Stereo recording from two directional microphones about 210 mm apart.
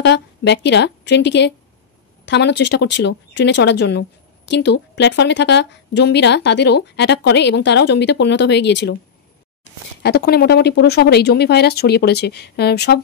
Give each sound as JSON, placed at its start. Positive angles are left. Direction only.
{"t": 0.0, "sound": "a woman's voice", "side_deg": 55}
{"t": 10.0, "sound": "speech", "side_deg": 50}